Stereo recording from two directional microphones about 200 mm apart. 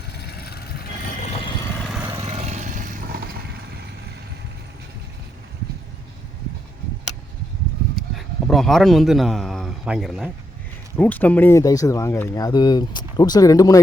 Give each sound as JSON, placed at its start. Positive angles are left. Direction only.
{"t": 0.1, "sound": "vehicle", "side_deg": 55}
{"t": 2.0, "sound": "a sound", "side_deg": -15}
{"t": 2.3, "sound": "vehicle", "side_deg": -35}
{"t": 8.1, "sound": "a man's voice", "side_deg": 0}